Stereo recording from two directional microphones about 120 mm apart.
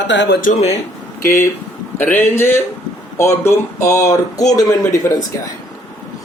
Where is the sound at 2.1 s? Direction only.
20° left (ahead or behind).